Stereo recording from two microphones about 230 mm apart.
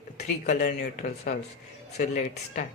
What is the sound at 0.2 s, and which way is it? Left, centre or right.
Speech, left.